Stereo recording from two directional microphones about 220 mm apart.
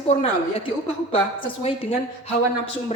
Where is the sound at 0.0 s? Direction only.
25° left (ahead or behind).